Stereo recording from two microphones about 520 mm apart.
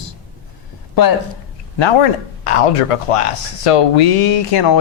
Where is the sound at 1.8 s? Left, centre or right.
Left.